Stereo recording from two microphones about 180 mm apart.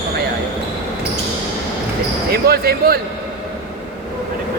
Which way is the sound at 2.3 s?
60° right (ahead or behind).